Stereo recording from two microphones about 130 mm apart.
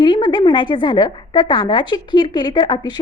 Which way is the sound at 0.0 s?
35° left (ahead or behind).